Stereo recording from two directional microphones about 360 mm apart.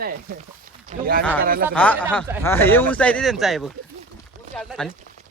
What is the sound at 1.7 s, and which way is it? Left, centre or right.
Speech, centre.